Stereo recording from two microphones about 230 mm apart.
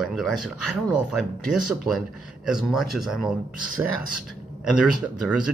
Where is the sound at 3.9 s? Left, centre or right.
Left.